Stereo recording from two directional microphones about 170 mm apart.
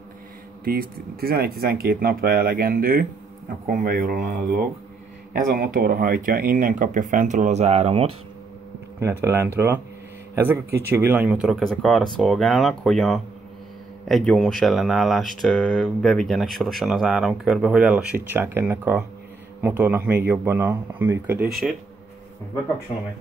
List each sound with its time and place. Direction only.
0.7 s speech: 60° right (ahead or behind); by 8.2 s 35° right (ahead or behind)
9.0 s speech: 15° right (ahead or behind)
21.5 s speech: centre (ahead or behind)
22.9 s speech: 45° left (ahead or behind)